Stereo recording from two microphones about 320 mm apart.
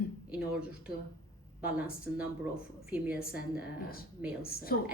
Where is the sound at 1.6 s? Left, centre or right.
Centre.